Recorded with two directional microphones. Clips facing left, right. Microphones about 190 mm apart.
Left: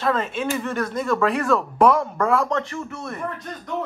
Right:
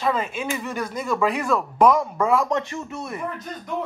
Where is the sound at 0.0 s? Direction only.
5° right (ahead or behind).